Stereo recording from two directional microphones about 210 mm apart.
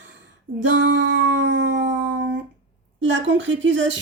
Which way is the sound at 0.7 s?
55° right (ahead or behind).